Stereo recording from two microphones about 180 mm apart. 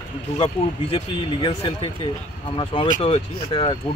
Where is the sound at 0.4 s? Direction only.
30° left (ahead or behind).